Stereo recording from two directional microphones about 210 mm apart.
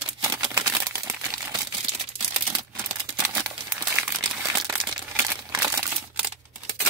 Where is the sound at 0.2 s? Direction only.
20° right (ahead or behind).